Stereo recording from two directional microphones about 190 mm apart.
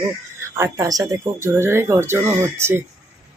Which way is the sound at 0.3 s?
15° right (ahead or behind).